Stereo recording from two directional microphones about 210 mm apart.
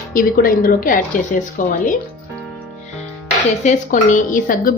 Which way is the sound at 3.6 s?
35° left (ahead or behind).